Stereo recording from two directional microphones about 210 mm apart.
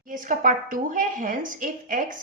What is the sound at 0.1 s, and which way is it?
A woman's voice, 40° right (ahead or behind).